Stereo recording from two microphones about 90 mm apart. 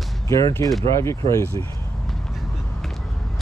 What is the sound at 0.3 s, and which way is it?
Speech, 35° left (ahead or behind).